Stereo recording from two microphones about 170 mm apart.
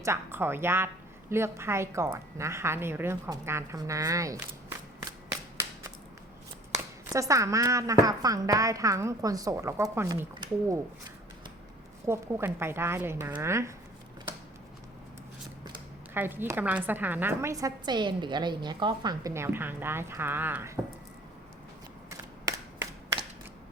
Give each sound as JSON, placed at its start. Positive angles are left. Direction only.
{"t": 0.0, "sound": "a woman's voice", "side_deg": -15}
{"t": 6.7, "sound": "a woman's voice", "side_deg": -20}
{"t": 10.3, "sound": "speech", "side_deg": -25}
{"t": 12.0, "sound": "a woman's voice", "side_deg": -15}
{"t": 16.1, "sound": "a woman's voice", "side_deg": -10}
{"t": 22.2, "sound": "a sound", "side_deg": -20}